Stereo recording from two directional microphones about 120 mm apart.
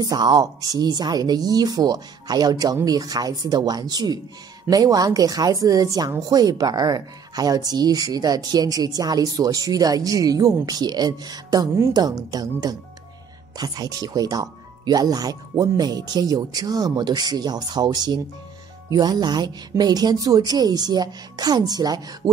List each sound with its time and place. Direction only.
0.0 s speech: 35° right (ahead or behind)